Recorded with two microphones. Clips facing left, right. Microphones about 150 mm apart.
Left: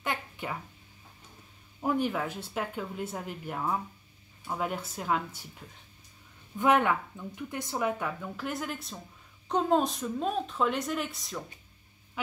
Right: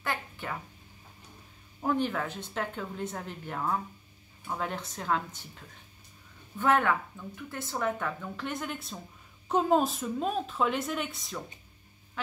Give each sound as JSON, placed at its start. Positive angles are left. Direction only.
{"t": 0.0, "sound": "a sound", "side_deg": 15}
{"t": 1.8, "sound": "speech", "side_deg": 10}
{"t": 6.6, "sound": "speech", "side_deg": 15}